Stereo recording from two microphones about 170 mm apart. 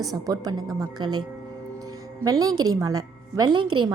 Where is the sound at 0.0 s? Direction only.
20° right (ahead or behind).